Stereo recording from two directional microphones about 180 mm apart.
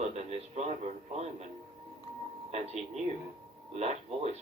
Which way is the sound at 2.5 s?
35° right (ahead or behind).